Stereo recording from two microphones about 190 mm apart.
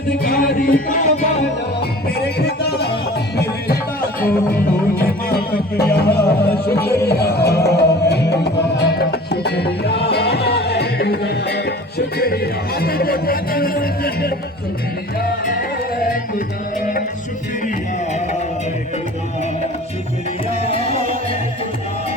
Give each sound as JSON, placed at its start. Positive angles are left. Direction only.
{"t": 0.2, "sound": "music", "side_deg": 50}
{"t": 1.8, "sound": "music", "side_deg": 60}
{"t": 20.7, "sound": "music", "side_deg": 30}